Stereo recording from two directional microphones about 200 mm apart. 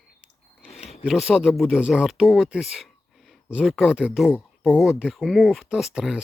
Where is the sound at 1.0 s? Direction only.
5° right (ahead or behind).